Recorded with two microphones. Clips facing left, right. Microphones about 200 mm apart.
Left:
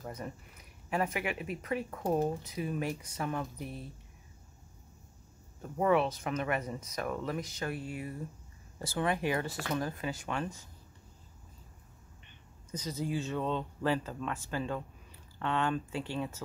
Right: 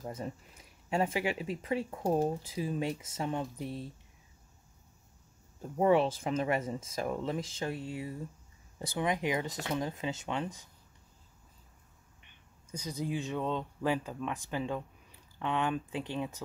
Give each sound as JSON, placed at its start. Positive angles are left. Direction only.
{"t": 0.0, "sound": "speech", "side_deg": -25}
{"t": 1.9, "sound": "speech", "side_deg": -15}
{"t": 2.1, "sound": "speech", "side_deg": -30}
{"t": 5.6, "sound": "speech", "side_deg": -30}
{"t": 12.7, "sound": "speech", "side_deg": -15}